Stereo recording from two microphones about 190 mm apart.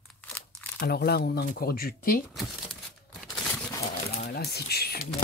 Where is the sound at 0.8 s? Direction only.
55° left (ahead or behind).